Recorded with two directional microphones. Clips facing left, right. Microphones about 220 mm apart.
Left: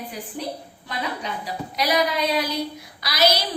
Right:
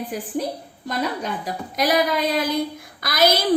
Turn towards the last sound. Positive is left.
turn(degrees=-50)  # may be behind; listen again after turning